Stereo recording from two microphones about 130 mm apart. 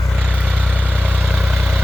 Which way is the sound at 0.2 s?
Centre (ahead or behind).